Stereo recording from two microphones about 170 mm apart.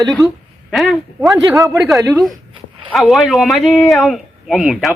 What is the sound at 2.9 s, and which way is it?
Speech, centre (ahead or behind).